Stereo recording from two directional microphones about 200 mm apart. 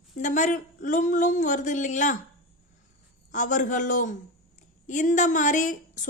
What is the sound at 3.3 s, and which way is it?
A woman's voice, 40° left (ahead or behind).